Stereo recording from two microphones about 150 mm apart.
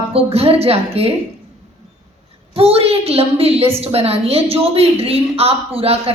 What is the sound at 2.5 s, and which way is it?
A woman's voice, 40° right (ahead or behind).